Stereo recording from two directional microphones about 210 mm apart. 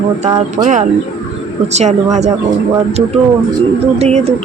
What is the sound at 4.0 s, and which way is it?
Speech, 30° right (ahead or behind).